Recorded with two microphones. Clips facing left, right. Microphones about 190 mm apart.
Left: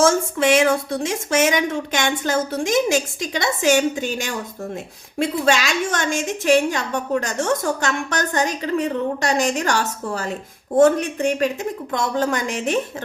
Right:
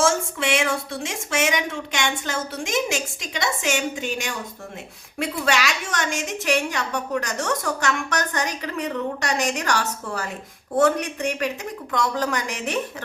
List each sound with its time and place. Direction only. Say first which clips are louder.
0.0 s a woman's voice: left 5 dB; 40° left (ahead or behind); by 12.8 s 25° left (ahead or behind)